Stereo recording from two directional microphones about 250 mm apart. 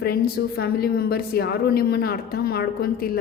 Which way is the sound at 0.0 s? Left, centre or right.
Left.